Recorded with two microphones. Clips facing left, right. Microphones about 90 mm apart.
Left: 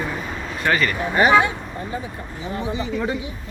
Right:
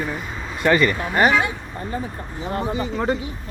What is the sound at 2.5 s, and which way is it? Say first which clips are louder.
Speech: right 1 dB; 50° right (ahead or behind).